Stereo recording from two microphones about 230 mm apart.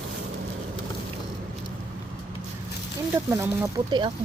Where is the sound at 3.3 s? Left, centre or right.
Centre.